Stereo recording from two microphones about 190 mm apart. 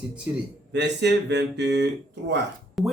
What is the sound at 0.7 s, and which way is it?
Speech, 65° right (ahead or behind).